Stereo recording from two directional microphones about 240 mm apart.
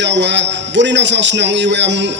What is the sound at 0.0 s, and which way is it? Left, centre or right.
A man's voice, right.